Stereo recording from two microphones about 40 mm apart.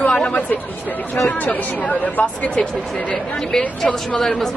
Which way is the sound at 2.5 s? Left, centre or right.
Left.